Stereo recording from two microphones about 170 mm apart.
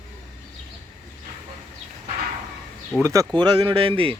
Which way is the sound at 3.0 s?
25° right (ahead or behind).